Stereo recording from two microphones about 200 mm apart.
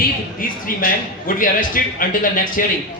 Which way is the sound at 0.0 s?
45° left (ahead or behind).